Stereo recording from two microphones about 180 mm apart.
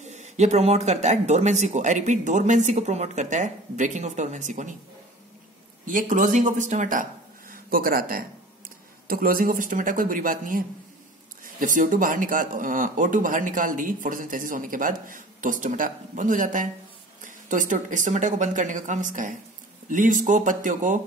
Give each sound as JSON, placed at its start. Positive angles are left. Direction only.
{"t": 0.0, "sound": "speech", "side_deg": -40}
{"t": 5.9, "sound": "speech", "side_deg": -45}